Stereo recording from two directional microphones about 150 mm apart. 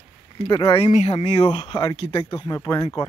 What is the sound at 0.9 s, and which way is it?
Speech, 45° left (ahead or behind).